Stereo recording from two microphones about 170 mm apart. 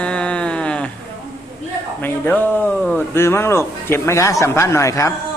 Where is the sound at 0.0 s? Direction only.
5° left (ahead or behind).